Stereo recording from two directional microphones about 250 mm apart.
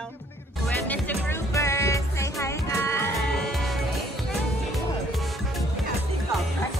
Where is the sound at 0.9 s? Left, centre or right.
Centre.